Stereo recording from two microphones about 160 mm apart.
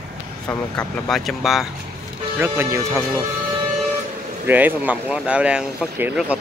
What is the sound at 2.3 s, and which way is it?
Speech, 15° right (ahead or behind).